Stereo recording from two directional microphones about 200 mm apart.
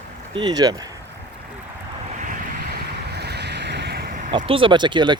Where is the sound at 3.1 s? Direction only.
55° right (ahead or behind).